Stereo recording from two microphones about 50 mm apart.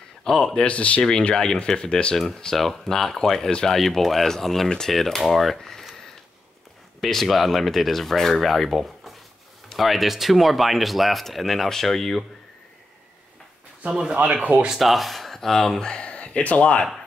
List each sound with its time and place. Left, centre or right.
0.2 s speech: centre
0.7 s speech: left
2.1 s speech: centre
7.0 s speech: centre
13.8 s speech: right
14.2 s speech: right
14.8 s speech: centre; by 16.8 s left